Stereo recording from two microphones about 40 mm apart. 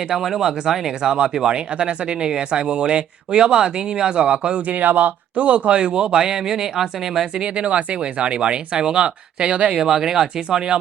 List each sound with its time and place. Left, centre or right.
0.1 s speech: centre
7.4 s speech: right
9.8 s speech: centre